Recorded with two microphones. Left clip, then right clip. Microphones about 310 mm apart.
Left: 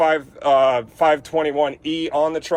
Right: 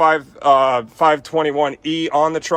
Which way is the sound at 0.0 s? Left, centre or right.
Centre.